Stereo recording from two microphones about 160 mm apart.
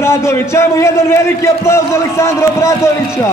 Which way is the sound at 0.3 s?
15° left (ahead or behind).